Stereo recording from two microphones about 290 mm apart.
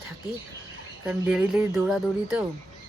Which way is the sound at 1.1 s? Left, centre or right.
Centre.